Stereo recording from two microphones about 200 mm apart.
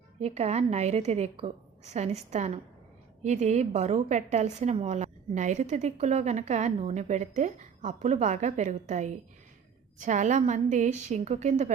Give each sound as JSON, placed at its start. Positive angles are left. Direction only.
{"t": 0.2, "sound": "a woman's voice", "side_deg": -30}